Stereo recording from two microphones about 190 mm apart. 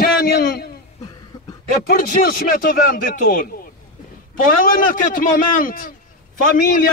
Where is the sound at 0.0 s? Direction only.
55° left (ahead or behind).